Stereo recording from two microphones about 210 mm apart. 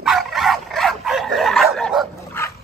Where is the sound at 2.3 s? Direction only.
10° left (ahead or behind).